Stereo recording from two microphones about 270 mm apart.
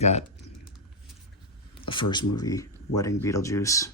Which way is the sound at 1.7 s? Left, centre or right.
Centre.